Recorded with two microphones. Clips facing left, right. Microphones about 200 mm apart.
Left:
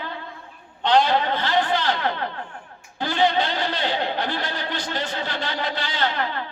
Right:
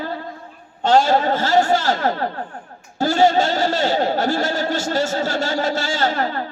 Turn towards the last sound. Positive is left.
turn(degrees=-45)  # may be behind; listen again after turning